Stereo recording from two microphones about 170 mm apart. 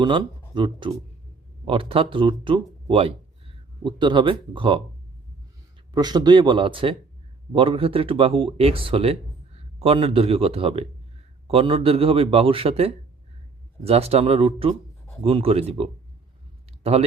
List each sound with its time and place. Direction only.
0.0 s speech: 30° right (ahead or behind)
5.9 s speech: 25° right (ahead or behind)